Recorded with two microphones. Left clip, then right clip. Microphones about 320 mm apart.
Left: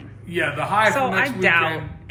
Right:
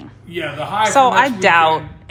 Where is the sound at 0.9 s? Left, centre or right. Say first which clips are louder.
Right 8 dB; centre.